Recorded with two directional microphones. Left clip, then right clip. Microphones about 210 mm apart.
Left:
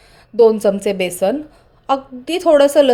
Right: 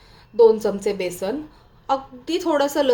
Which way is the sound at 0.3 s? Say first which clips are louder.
Left 3 dB; 35° left (ahead or behind).